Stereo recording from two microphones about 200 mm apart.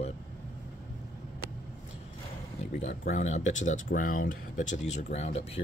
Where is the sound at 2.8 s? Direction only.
35° left (ahead or behind).